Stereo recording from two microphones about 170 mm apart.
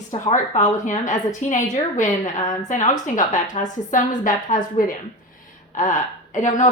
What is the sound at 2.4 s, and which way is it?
Speech, 20° left (ahead or behind).